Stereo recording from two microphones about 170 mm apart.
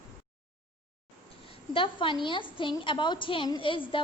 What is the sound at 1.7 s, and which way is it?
A woman's voice, 30° left (ahead or behind).